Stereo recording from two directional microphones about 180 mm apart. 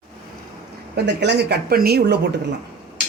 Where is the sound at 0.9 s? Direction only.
70° right (ahead or behind).